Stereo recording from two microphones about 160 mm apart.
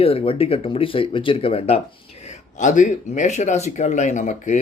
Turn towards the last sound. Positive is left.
turn(degrees=50)  # may be behind; listen again after turning